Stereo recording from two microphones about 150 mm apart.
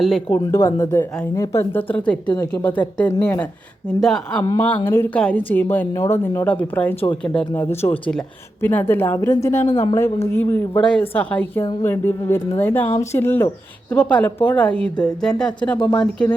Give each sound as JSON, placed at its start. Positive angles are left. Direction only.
{"t": 0.0, "sound": "speech", "side_deg": 0}
{"t": 0.3, "sound": "a woman's voice", "side_deg": 20}
{"t": 9.6, "sound": "a woman's voice", "side_deg": 40}
{"t": 10.2, "sound": "a woman's voice", "side_deg": 15}